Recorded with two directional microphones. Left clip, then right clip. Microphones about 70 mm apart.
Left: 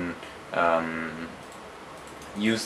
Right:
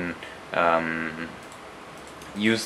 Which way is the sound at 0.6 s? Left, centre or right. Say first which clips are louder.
Right 2 dB; right.